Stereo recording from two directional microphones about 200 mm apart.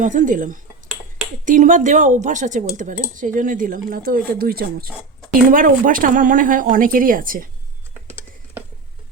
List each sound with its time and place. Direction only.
0.0 s speech: 40° right (ahead or behind)